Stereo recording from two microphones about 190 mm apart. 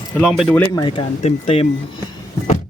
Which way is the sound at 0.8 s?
25° left (ahead or behind).